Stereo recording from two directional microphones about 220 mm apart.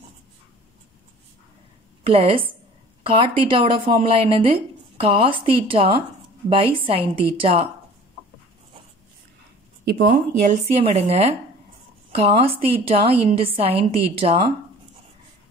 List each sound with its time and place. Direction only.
2.0 s a woman's voice: 25° right (ahead or behind)
9.8 s speech: 50° right (ahead or behind)
10.4 s a woman's voice: 30° right (ahead or behind)